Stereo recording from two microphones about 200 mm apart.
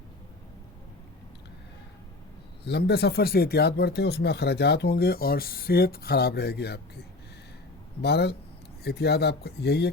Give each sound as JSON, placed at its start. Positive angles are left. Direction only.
{"t": 2.6, "sound": "speech", "side_deg": 55}
{"t": 8.0, "sound": "speech", "side_deg": 55}